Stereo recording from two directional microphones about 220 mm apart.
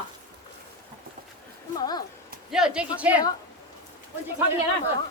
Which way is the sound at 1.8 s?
15° left (ahead or behind).